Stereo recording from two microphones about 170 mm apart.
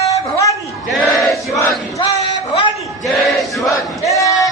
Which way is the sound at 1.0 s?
Centre (ahead or behind).